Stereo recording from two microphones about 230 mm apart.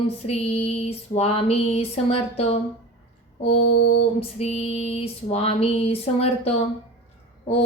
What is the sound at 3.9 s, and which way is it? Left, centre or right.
Female singing, left.